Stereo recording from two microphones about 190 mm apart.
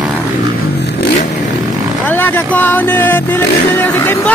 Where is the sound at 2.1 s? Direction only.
10° left (ahead or behind).